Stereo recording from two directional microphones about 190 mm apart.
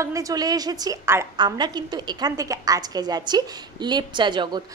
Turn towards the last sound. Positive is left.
turn(degrees=-25)  # may be behind; listen again after turning